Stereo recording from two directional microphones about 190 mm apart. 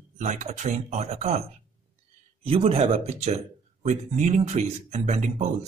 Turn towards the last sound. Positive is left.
turn(degrees=-40)  # may be behind; listen again after turning